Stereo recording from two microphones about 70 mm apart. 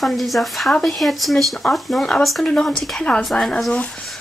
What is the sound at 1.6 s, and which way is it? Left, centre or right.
A woman's voice, centre.